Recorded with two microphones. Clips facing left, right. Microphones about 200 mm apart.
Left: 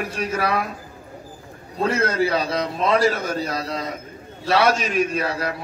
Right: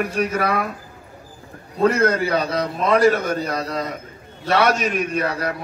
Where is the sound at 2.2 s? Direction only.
30° left (ahead or behind).